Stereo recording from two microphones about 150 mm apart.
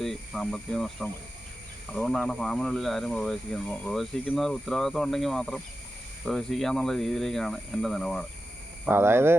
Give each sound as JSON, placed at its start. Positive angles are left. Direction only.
{"t": 0.0, "sound": "speech", "side_deg": 5}
{"t": 8.9, "sound": "speech", "side_deg": -15}